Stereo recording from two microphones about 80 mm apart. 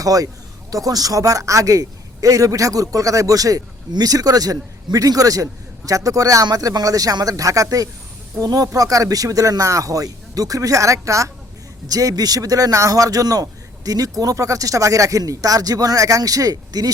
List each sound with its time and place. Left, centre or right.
0.0 s a man's voice: right